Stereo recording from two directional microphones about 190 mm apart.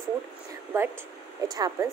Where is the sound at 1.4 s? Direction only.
20° right (ahead or behind).